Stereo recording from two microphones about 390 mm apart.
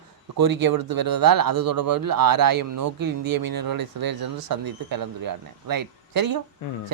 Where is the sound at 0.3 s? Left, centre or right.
Right.